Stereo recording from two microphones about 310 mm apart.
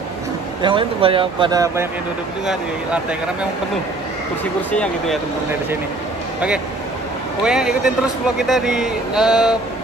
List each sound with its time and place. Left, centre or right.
0.6 s speech: centre
4.6 s speech: centre
7.4 s speech: centre